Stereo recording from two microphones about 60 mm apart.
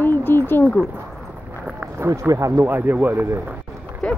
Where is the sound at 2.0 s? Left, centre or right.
Right.